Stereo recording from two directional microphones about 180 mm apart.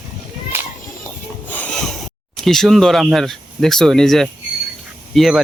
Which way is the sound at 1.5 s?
5° left (ahead or behind).